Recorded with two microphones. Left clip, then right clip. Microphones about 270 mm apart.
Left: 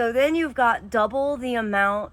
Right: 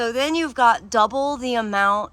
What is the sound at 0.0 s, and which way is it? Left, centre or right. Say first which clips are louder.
Speech: left 1 dB; centre.